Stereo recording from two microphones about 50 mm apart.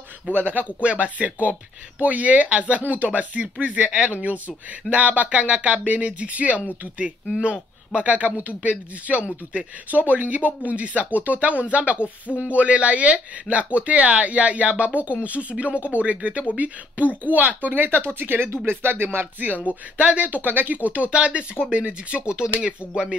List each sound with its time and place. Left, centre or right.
0.5 s speech: right
19.7 s speech: right